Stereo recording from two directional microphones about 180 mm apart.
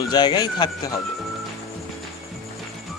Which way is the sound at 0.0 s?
25° left (ahead or behind).